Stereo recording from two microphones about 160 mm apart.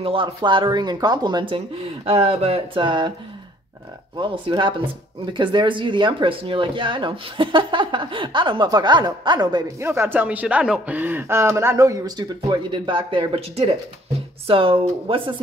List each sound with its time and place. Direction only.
0.0 s speech: 35° right (ahead or behind)
4.2 s speech: 30° right (ahead or behind)